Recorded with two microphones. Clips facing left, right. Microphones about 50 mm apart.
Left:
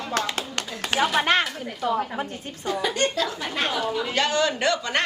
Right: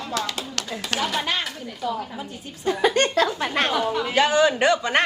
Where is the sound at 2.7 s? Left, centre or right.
Right.